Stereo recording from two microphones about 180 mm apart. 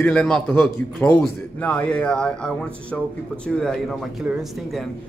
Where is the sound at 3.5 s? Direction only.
Centre (ahead or behind).